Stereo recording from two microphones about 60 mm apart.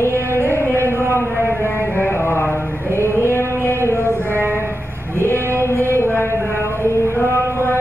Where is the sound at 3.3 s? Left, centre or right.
Left.